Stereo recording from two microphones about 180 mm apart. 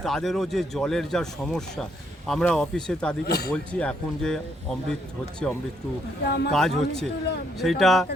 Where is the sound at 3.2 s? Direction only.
60° left (ahead or behind).